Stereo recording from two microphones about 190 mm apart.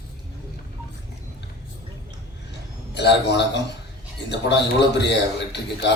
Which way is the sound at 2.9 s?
65° left (ahead or behind).